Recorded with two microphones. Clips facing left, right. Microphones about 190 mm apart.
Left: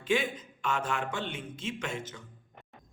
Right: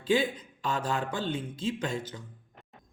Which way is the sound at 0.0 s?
35° right (ahead or behind).